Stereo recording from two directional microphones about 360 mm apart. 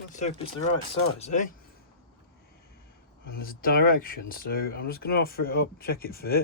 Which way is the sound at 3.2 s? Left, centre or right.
Left.